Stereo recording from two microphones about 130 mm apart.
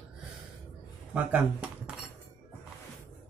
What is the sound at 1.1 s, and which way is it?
Speech, 10° right (ahead or behind).